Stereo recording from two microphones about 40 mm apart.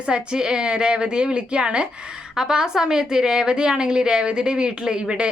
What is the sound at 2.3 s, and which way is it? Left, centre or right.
A woman's voice, centre.